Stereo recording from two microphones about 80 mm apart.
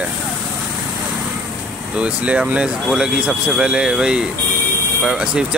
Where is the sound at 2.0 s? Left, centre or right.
Centre.